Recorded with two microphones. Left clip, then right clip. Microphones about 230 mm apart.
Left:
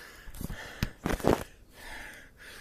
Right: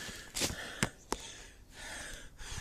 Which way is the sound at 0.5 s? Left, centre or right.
Centre.